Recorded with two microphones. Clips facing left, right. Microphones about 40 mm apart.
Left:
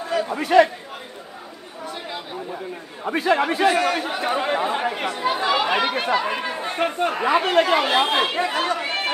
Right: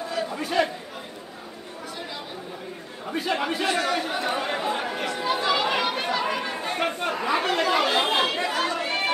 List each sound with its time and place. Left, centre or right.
0.1 s chatter: left
3.3 s speech: left; by 7.1 s centre
7.1 s speech: left